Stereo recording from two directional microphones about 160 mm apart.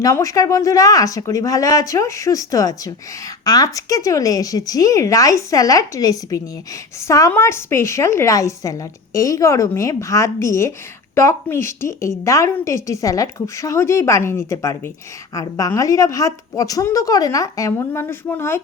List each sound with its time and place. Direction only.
0.0 s a woman's voice: 20° left (ahead or behind)